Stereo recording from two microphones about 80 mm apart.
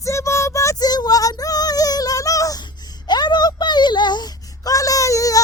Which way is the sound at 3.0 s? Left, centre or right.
Left.